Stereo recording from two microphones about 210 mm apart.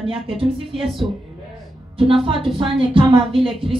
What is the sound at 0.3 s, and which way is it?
Speech, 25° right (ahead or behind).